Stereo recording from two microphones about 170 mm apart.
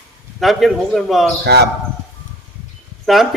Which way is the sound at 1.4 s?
75° right (ahead or behind).